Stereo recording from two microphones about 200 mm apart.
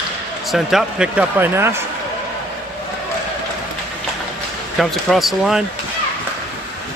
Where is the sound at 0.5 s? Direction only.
Centre (ahead or behind).